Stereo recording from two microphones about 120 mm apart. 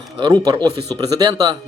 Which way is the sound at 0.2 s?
40° right (ahead or behind).